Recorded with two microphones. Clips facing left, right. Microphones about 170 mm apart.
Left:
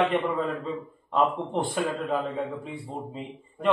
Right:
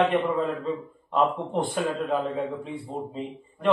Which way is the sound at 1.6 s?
Centre (ahead or behind).